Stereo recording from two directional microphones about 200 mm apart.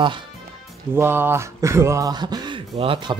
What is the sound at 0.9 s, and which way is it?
Speech, 10° right (ahead or behind).